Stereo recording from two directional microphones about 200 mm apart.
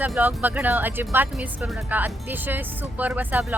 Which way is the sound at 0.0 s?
10° right (ahead or behind).